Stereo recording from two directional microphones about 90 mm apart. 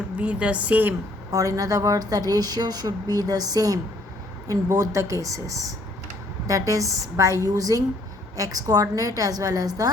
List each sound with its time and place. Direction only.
0.2 s speech: 15° right (ahead or behind)
1.3 s a woman's voice: 40° right (ahead or behind)